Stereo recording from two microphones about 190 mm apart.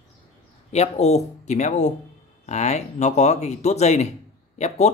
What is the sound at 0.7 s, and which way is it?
Speech, 35° left (ahead or behind).